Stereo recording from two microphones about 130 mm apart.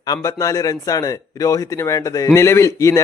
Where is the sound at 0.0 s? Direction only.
25° left (ahead or behind).